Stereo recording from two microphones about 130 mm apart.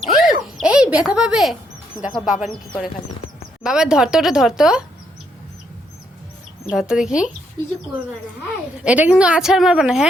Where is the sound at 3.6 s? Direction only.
5° right (ahead or behind).